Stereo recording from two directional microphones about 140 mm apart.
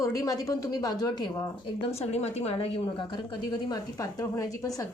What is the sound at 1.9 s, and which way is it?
A woman's voice, 50° left (ahead or behind).